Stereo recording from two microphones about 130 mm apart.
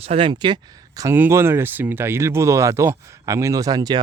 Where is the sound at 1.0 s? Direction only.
20° right (ahead or behind).